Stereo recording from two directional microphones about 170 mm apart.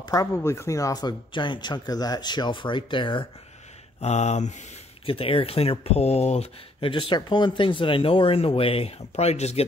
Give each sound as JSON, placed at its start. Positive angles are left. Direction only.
{"t": 0.0, "sound": "speech", "side_deg": 20}
{"t": 4.0, "sound": "speech", "side_deg": 40}